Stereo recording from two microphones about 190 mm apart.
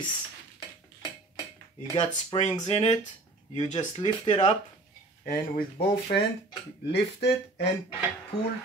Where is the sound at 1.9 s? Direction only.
25° left (ahead or behind).